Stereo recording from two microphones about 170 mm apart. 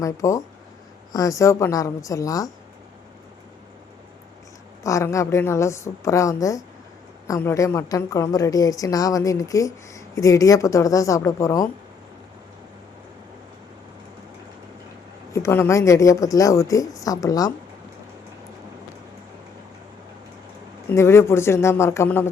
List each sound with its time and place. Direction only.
0.0 s a woman's voice: 20° left (ahead or behind)
4.8 s a woman's voice: 20° left (ahead or behind)
15.3 s a woman's voice: 15° left (ahead or behind)
20.9 s a woman's voice: 15° left (ahead or behind)